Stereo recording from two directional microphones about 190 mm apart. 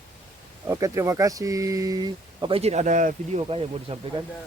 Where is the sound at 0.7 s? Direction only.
15° right (ahead or behind); by 3.4 s 40° right (ahead or behind).